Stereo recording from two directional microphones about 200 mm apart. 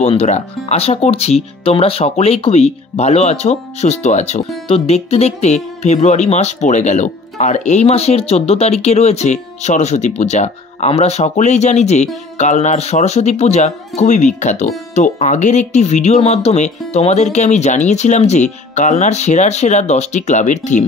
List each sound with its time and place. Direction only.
0.0 s speech: 30° left (ahead or behind)